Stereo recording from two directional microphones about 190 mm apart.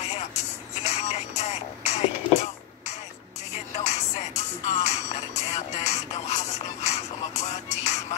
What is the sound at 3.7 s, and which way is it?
Music, 35° left (ahead or behind).